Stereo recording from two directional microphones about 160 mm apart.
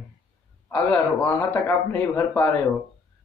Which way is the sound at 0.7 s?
10° left (ahead or behind).